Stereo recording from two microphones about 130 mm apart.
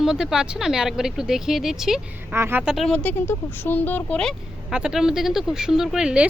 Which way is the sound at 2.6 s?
Centre (ahead or behind).